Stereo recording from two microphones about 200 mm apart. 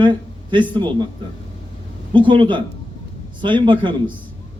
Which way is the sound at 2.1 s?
25° right (ahead or behind).